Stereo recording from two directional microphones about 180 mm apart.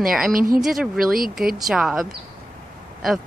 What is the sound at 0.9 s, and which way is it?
Speech, 50° right (ahead or behind).